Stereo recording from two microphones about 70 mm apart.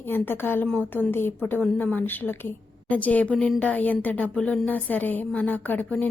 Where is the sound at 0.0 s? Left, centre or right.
Left.